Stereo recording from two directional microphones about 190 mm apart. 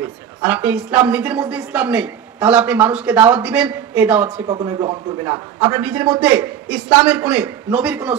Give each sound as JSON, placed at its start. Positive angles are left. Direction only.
{"t": 0.0, "sound": "a woman's voice", "side_deg": -10}
{"t": 4.5, "sound": "speech", "side_deg": -20}
{"t": 5.7, "sound": "a woman's voice", "side_deg": -10}